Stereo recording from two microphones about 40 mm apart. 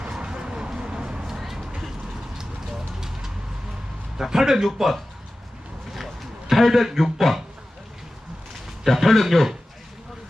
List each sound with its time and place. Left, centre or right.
0.1 s vehicle: centre
4.2 s speech: centre
6.5 s a man's voice: centre
8.8 s a man's voice: centre